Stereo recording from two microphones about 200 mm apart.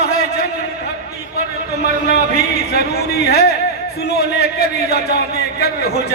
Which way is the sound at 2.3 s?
55° left (ahead or behind).